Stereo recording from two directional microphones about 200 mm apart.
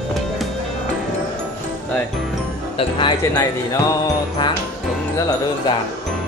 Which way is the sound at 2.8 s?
25° left (ahead or behind).